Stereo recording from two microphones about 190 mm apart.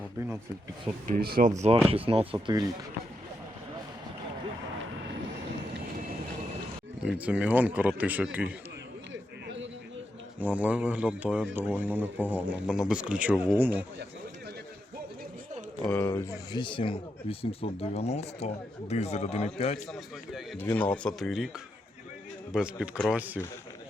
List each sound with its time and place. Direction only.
1.0 s speech: 50° right (ahead or behind); by 2.6 s 25° right (ahead or behind)
7.0 s speech: 5° right (ahead or behind)
10.4 s speech: 10° right (ahead or behind)
15.8 s speech: 10° left (ahead or behind); by 19.8 s 30° left (ahead or behind)
19.9 s speech: centre (ahead or behind)
22.5 s speech: 5° right (ahead or behind)